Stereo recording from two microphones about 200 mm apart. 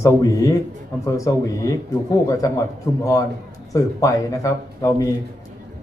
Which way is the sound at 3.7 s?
15° left (ahead or behind).